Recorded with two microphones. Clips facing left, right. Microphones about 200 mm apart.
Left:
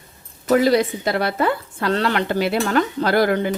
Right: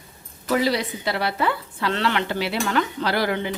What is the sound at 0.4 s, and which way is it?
A woman's voice, 50° left (ahead or behind).